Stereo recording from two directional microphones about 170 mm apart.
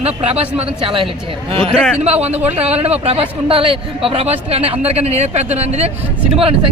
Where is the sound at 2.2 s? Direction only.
40° right (ahead or behind).